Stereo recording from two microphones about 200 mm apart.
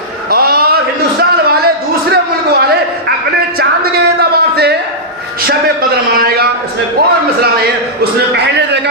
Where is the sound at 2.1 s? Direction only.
50° right (ahead or behind).